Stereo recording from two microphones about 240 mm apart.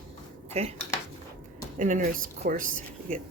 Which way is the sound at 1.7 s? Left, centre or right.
Right.